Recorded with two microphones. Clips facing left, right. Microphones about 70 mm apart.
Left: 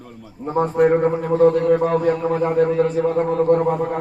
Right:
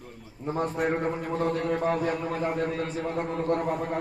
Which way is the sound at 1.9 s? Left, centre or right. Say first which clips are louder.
Left 9 dB; left.